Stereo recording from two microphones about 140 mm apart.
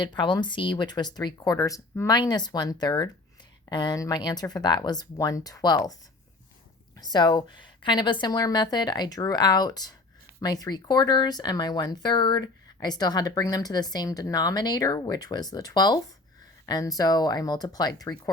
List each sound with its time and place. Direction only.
0.0 s speech: 35° left (ahead or behind)
6.9 s speech: 30° left (ahead or behind)